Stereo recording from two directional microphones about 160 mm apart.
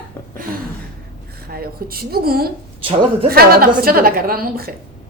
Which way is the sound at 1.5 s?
70° right (ahead or behind).